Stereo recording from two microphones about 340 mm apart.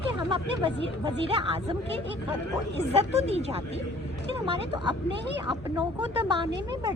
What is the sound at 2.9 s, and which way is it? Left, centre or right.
Speech, centre.